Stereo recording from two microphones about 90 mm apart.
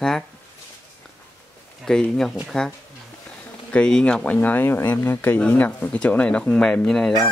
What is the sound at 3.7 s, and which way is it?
Speech, 10° left (ahead or behind).